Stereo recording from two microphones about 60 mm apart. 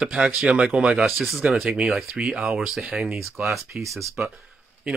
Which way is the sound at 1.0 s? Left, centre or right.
Centre.